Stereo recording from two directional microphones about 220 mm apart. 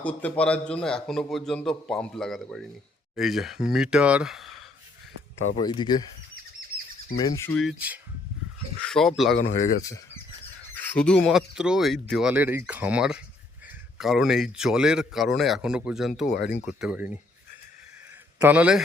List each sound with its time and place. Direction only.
0.0 s speech: 5° left (ahead or behind)
5.5 s speech: 20° left (ahead or behind)
7.3 s speech: 15° left (ahead or behind)
7.5 s speech: centre (ahead or behind)
10.8 s speech: 5° left (ahead or behind)
16.3 s speech: 45° left (ahead or behind)
16.6 s speech: 5° right (ahead or behind)
18.3 s speech: 5° right (ahead or behind)